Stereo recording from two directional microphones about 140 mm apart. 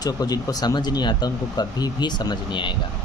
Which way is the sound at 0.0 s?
25° left (ahead or behind).